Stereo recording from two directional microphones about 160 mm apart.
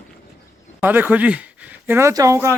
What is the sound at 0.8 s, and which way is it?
Speech, 10° right (ahead or behind).